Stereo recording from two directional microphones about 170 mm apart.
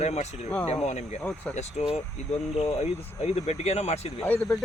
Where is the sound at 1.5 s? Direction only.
40° left (ahead or behind).